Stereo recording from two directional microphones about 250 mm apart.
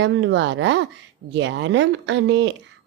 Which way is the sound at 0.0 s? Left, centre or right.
Right.